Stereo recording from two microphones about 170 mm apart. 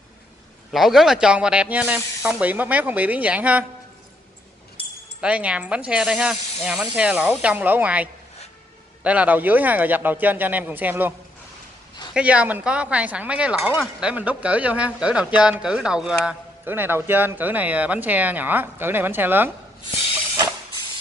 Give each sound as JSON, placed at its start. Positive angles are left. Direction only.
{"t": 0.7, "sound": "speech", "side_deg": 0}
{"t": 5.2, "sound": "speech", "side_deg": -5}